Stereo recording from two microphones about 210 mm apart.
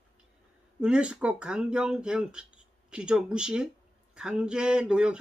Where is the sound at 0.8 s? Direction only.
5° right (ahead or behind).